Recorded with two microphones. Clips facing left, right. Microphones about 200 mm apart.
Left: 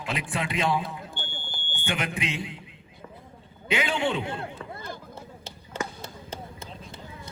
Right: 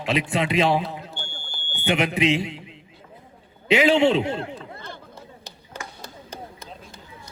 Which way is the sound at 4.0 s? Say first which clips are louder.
Right 8 dB; 25° right (ahead or behind).